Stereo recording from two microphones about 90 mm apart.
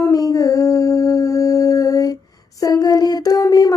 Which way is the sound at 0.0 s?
40° left (ahead or behind).